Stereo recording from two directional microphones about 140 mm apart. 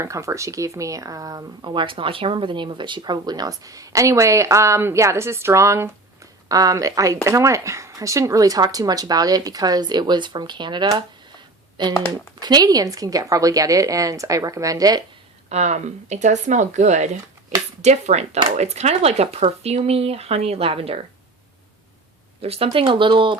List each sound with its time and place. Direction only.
0.0 s speech: 20° right (ahead or behind)
11.9 s speech: 20° left (ahead or behind)
12.4 s speech: 30° right (ahead or behind)
15.4 s speech: 55° right (ahead or behind)
22.4 s speech: 45° right (ahead or behind)